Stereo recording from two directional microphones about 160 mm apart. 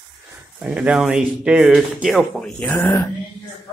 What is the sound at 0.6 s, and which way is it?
Speech, 5° right (ahead or behind).